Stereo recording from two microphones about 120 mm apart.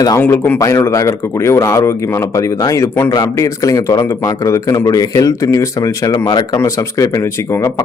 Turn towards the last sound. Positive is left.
turn(degrees=25)  # may be behind; listen again after turning